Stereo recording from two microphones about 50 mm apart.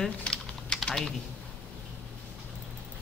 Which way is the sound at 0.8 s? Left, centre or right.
Centre.